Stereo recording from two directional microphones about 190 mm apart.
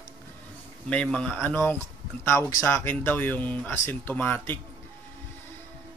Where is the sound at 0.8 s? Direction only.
5° left (ahead or behind).